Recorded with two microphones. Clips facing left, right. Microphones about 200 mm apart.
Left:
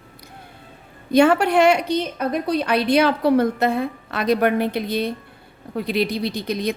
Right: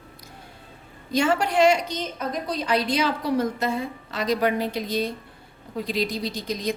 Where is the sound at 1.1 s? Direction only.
60° left (ahead or behind).